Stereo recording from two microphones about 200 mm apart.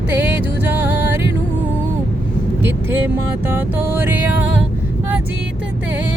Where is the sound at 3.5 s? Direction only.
10° right (ahead or behind).